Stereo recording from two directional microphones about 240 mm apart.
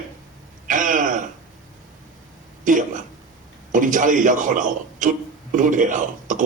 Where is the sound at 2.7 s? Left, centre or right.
Right.